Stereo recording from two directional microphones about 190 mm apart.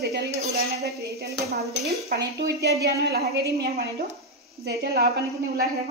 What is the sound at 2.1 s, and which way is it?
A woman's voice, 60° right (ahead or behind).